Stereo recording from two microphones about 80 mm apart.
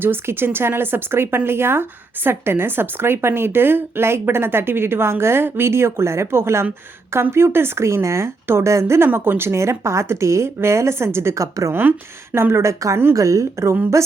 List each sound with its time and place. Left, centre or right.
0.0 s speech: right
11.7 s speech: right